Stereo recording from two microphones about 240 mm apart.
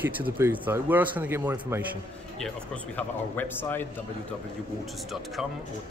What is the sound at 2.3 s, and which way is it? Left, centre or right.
Speech, centre.